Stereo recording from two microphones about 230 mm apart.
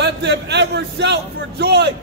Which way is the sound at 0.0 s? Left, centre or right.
Right.